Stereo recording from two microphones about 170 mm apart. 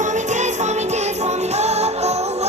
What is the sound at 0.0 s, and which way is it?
Music, 45° right (ahead or behind).